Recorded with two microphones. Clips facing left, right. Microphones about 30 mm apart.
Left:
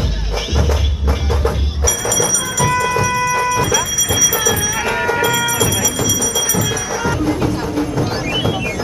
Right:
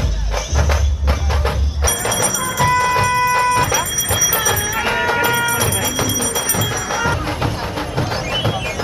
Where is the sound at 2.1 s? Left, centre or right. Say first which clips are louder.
Left 1 dB; right.